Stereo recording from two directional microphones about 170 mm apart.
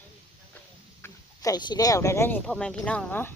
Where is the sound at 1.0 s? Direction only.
20° left (ahead or behind).